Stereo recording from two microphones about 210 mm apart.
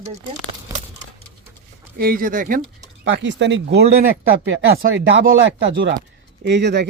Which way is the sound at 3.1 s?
60° right (ahead or behind).